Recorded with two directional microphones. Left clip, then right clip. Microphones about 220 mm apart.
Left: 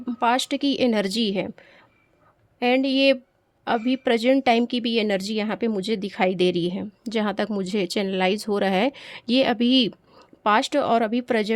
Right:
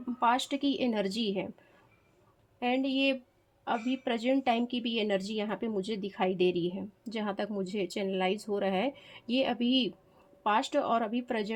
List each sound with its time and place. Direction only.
0.0 s speech: 50° left (ahead or behind)
2.6 s speech: 50° left (ahead or behind)